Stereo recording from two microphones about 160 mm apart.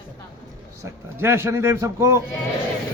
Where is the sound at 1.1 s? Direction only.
15° right (ahead or behind).